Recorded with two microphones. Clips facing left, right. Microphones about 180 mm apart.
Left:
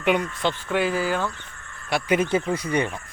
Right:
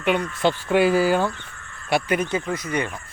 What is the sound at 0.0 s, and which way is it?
Speech, 15° left (ahead or behind).